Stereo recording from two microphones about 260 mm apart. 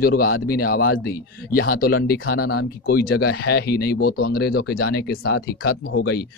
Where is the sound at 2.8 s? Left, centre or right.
Left.